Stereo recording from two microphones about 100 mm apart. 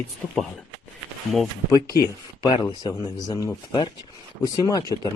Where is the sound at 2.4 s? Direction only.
45° left (ahead or behind).